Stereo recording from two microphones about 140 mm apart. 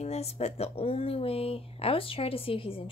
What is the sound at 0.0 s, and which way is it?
Speech, 50° left (ahead or behind).